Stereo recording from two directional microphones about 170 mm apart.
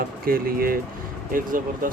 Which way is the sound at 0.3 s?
60° right (ahead or behind).